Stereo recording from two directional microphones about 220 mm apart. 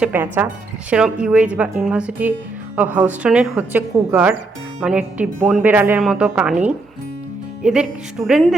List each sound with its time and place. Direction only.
0.0 s speech: 10° right (ahead or behind)